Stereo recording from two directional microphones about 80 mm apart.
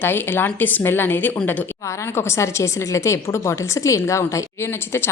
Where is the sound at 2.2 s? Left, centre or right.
Left.